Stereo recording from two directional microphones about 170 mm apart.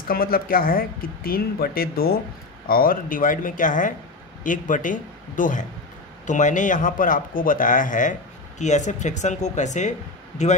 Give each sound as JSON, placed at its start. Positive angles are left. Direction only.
{"t": 0.1, "sound": "a man's voice", "side_deg": 60}